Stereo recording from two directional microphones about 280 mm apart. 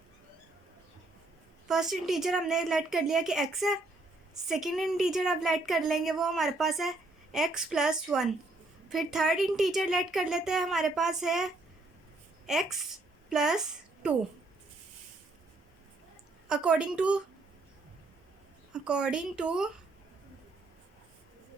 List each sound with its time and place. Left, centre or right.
1.6 s a woman's voice: centre
16.5 s a woman's voice: centre
18.7 s a woman's voice: centre